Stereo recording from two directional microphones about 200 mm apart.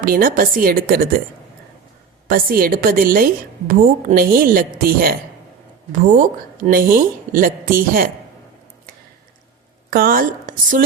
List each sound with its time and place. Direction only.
0.0 s a woman's voice: 45° right (ahead or behind)
2.2 s a woman's voice: 45° right (ahead or behind)
9.9 s a woman's voice: 45° right (ahead or behind)